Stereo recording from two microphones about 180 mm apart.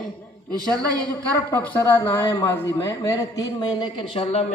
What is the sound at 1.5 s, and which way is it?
A man's voice, 10° left (ahead or behind).